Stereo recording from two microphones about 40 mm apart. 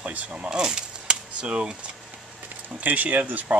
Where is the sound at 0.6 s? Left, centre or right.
Centre.